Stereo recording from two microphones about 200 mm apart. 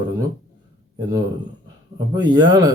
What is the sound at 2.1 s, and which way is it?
Speech, 20° right (ahead or behind).